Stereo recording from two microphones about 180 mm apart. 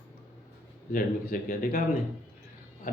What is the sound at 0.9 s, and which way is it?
Speech, 50° left (ahead or behind).